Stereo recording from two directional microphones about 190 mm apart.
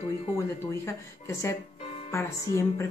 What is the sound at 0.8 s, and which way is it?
A woman's voice, 15° left (ahead or behind).